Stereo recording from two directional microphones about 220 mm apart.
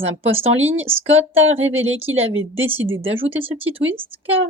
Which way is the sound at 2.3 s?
65° right (ahead or behind).